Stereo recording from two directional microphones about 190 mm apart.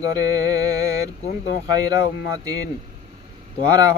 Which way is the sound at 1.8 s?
20° right (ahead or behind).